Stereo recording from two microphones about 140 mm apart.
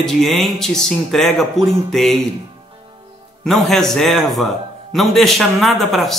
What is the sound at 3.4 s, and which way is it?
Speech, centre (ahead or behind).